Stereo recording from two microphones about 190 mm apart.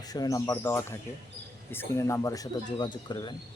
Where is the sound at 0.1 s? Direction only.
20° left (ahead or behind).